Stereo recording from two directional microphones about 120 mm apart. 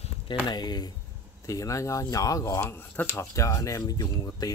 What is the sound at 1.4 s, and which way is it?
Speech, 25° left (ahead or behind).